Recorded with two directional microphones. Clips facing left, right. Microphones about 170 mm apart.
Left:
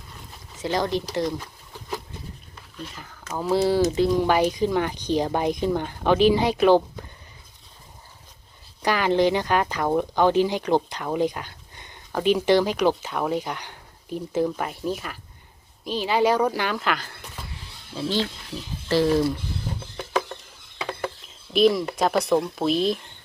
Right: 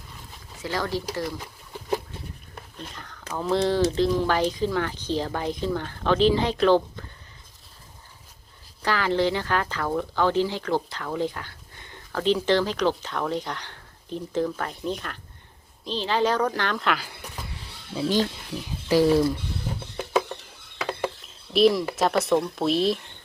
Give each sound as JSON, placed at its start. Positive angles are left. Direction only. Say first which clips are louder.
{"t": 0.6, "sound": "speech", "louder": "left 4 dB", "side_deg": 20}
{"t": 2.9, "sound": "speech", "louder": "even", "side_deg": 5}
{"t": 8.8, "sound": "speech", "louder": "left 3 dB", "side_deg": 15}
{"t": 18.9, "sound": "speech", "louder": "right 1 dB", "side_deg": -10}
{"t": 21.5, "sound": "speech", "louder": "even", "side_deg": 0}